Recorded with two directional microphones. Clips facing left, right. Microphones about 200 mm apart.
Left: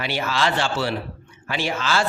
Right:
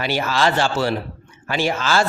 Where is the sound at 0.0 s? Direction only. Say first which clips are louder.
Right 4 dB; 40° right (ahead or behind).